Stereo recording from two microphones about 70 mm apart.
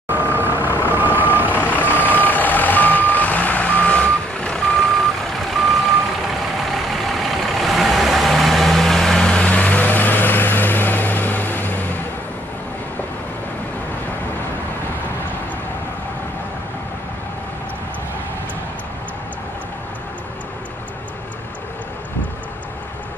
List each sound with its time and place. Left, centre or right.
0.1 s vehicle: right
0.8 s reversing beeps: right
1.6 s reversing beeps: left
5.5 s reversing beeps: centre
6.9 s vehicle: centre; by 11.8 s left